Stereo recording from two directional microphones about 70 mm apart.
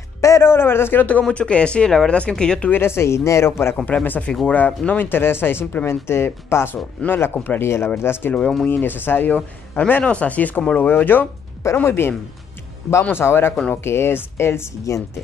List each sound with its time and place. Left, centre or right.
0.2 s a man's voice: left
1.2 s speech: centre
2.7 s speech: left
3.8 s speech: left
8.4 s speech: centre
8.6 s speech: left
13.1 s speech: left